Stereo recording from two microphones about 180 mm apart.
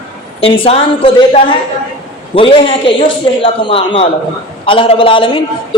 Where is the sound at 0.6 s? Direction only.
30° left (ahead or behind).